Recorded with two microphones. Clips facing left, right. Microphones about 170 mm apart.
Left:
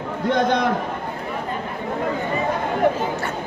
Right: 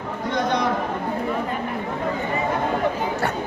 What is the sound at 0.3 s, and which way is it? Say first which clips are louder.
Speech: left 3 dB; 55° left (ahead or behind).